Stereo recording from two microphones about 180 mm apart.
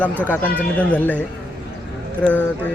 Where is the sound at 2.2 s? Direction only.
5° left (ahead or behind).